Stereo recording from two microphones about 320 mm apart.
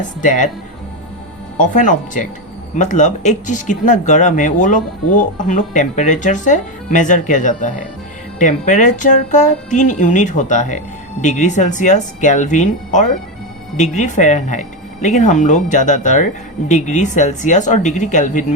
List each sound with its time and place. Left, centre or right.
0.0 s speech: left
1.5 s speech: left